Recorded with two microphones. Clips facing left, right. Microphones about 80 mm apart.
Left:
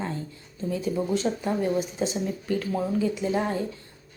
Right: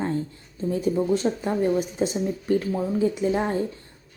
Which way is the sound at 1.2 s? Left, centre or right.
Centre.